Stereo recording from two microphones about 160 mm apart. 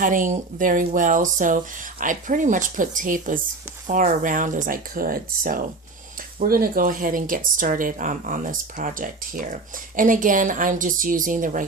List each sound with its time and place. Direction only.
0.0 s speech: 55° right (ahead or behind)